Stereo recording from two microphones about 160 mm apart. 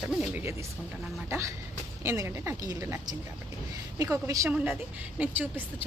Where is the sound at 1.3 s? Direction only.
20° right (ahead or behind).